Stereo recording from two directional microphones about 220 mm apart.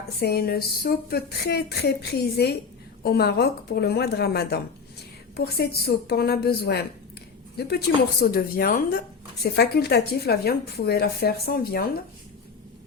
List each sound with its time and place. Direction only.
0.2 s speech: 45° left (ahead or behind)